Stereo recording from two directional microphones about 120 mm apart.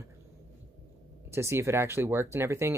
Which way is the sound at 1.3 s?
20° right (ahead or behind).